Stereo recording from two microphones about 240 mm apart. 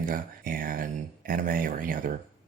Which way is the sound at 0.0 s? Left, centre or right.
Right.